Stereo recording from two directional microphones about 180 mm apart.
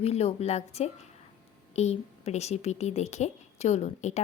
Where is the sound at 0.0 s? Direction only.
35° left (ahead or behind).